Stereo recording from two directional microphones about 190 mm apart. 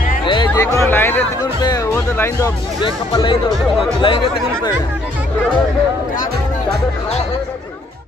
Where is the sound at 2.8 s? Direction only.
25° left (ahead or behind).